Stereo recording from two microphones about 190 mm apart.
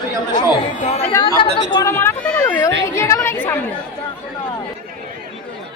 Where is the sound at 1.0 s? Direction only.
15° left (ahead or behind).